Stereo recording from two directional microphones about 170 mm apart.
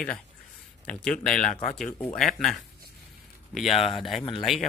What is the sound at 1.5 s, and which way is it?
Speech, 45° left (ahead or behind).